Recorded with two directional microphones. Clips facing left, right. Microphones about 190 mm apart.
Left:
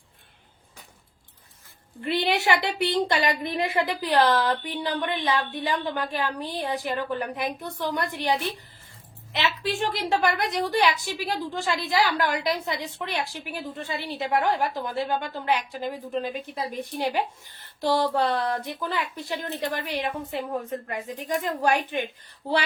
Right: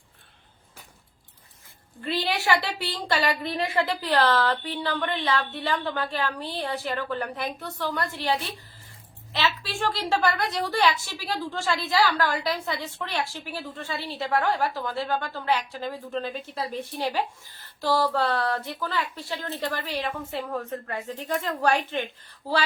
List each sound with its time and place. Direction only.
2.0 s a woman's voice: 20° left (ahead or behind)